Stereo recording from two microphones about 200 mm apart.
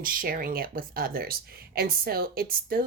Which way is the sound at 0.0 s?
45° right (ahead or behind).